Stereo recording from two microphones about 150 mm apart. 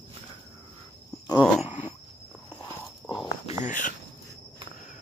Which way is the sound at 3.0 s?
35° left (ahead or behind).